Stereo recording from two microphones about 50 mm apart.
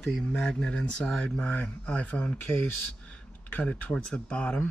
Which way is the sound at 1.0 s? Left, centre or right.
Centre.